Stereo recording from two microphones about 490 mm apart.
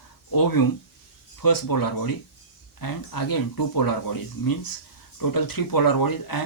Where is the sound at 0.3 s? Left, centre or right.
Left.